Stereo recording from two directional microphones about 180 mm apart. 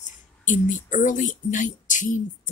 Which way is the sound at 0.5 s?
45° left (ahead or behind).